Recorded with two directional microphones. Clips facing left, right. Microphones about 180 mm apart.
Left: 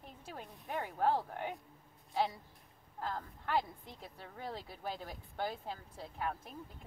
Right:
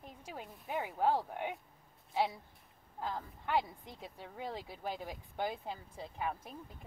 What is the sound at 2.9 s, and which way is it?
A woman's voice, 10° right (ahead or behind).